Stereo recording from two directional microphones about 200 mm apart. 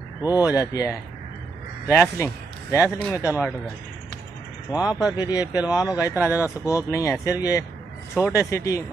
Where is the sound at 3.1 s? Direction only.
10° right (ahead or behind).